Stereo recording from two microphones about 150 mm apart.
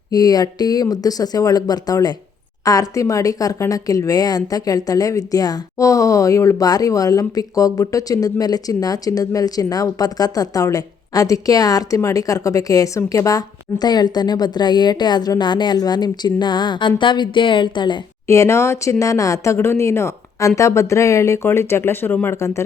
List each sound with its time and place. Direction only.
0.1 s a woman's voice: 25° left (ahead or behind)
18.3 s a woman's voice: 20° left (ahead or behind)